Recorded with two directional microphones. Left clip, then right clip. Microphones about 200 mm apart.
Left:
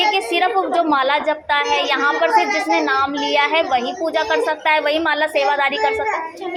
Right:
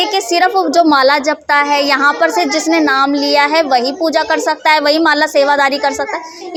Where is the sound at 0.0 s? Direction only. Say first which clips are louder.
Right 4 dB; 60° right (ahead or behind).